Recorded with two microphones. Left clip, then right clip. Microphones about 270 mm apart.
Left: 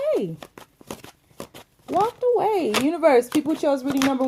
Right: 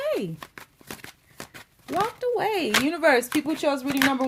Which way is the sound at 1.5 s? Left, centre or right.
Centre.